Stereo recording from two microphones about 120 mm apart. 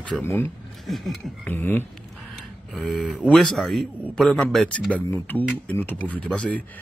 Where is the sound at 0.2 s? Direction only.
15° left (ahead or behind).